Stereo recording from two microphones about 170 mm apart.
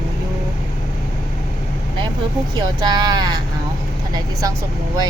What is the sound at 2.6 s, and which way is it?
Speech, 25° right (ahead or behind).